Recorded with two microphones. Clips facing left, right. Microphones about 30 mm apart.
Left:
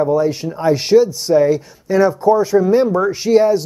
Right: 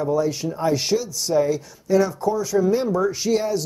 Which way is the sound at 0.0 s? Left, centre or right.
Left.